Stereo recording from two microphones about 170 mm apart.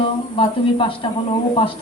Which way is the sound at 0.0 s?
30° left (ahead or behind).